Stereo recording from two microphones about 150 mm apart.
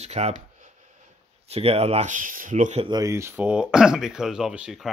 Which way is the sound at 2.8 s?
25° right (ahead or behind).